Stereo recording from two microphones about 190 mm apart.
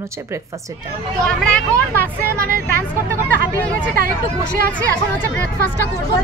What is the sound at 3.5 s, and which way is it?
Speech, 5° left (ahead or behind).